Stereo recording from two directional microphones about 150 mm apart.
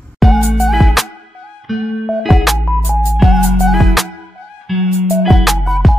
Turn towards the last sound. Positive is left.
turn(degrees=0)  # may be behind; listen again after turning